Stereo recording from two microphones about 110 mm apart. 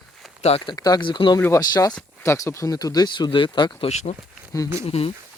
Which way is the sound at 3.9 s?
80° left.